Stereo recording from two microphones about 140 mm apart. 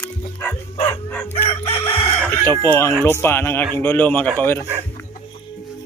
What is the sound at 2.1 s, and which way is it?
Chicken, 10° left (ahead or behind).